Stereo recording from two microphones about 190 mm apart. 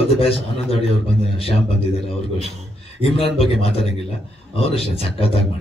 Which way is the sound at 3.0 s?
30° left (ahead or behind).